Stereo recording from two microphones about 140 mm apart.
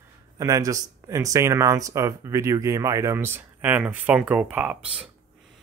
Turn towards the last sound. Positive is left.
turn(degrees=-5)  # may be behind; listen again after turning